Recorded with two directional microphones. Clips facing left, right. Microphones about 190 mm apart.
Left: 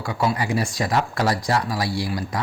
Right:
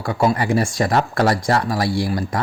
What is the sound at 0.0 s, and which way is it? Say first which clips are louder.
Speech: right 5 dB; 50° right (ahead or behind).